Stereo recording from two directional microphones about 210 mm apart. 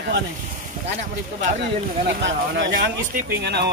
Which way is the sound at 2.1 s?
55° right (ahead or behind).